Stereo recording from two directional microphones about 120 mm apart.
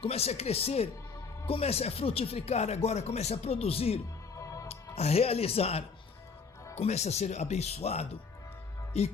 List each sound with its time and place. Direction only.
0.0 s speech: 60° left (ahead or behind)
4.4 s music: 25° left (ahead or behind)
4.7 s speech: 60° left (ahead or behind)
6.7 s speech: 65° left (ahead or behind)